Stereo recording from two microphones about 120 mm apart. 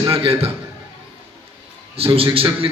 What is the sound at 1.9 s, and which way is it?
Speech, 50° right (ahead or behind).